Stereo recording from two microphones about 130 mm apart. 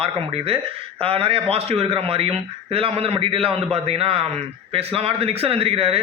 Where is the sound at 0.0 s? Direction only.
50° right (ahead or behind).